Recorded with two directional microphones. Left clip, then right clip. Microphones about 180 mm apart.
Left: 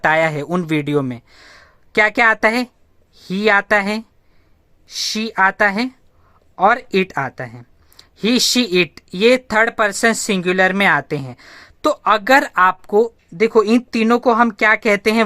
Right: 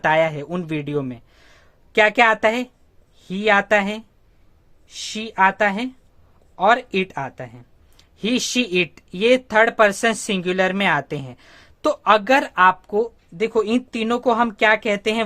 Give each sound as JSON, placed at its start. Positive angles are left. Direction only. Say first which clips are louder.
{"t": 0.0, "sound": "speech", "louder": "left 3 dB", "side_deg": 30}